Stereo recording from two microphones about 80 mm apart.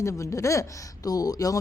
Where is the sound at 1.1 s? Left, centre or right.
Left.